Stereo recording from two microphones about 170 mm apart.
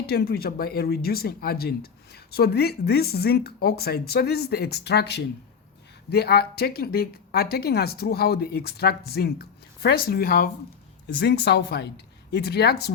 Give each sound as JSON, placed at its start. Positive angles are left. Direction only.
{"t": 0.0, "sound": "speech", "side_deg": 70}
{"t": 11.0, "sound": "speech", "side_deg": 75}